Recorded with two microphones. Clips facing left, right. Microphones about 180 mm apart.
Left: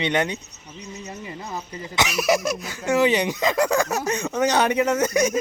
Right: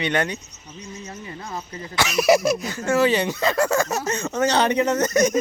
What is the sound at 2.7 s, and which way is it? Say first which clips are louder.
Speech: left 2 dB; 15° left (ahead or behind).